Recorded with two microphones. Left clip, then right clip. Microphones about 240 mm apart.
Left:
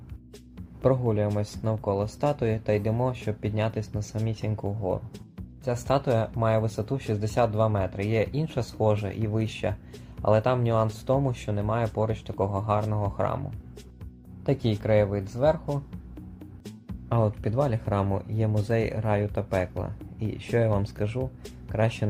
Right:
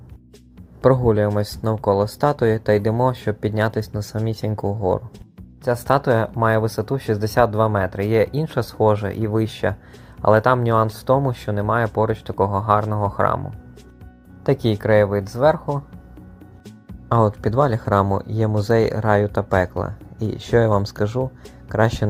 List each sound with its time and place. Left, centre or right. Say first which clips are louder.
0.8 s speech: right 8 dB; right
14.4 s speech: right 8 dB; centre
17.1 s speech: right 9 dB; right